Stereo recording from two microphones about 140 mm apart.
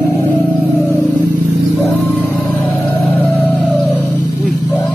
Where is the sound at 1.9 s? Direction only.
15° left (ahead or behind).